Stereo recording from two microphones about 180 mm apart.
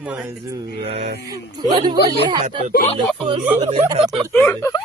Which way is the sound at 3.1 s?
30° right (ahead or behind).